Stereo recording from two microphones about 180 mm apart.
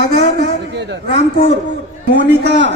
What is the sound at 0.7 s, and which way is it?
Speech, 70° right (ahead or behind).